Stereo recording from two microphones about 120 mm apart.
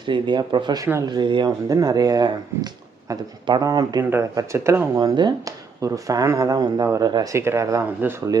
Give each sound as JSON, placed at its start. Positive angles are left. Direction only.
{"t": 0.0, "sound": "speech", "side_deg": -40}
{"t": 4.9, "sound": "speech", "side_deg": -35}